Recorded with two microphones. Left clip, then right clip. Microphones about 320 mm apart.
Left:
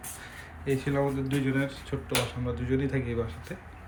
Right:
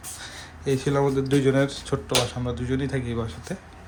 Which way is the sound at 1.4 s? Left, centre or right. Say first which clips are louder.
Right 8 dB; right.